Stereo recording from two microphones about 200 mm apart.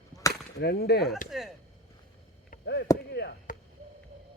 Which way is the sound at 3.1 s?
55° left (ahead or behind).